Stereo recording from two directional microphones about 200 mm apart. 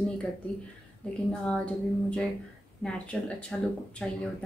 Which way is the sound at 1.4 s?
5° left (ahead or behind).